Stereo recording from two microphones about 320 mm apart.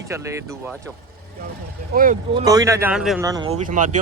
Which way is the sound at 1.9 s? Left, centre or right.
Right.